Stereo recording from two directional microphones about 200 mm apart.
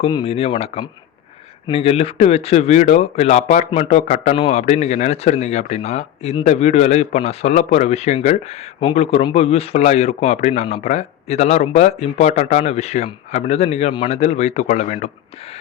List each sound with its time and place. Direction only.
0.0 s speech: 25° left (ahead or behind)